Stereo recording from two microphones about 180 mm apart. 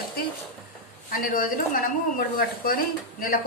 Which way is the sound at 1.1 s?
50° left (ahead or behind).